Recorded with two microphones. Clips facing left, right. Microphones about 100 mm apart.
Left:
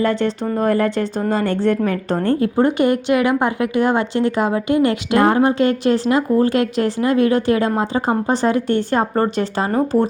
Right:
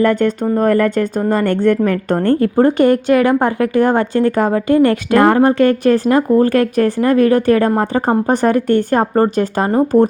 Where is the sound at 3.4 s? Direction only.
45° right (ahead or behind).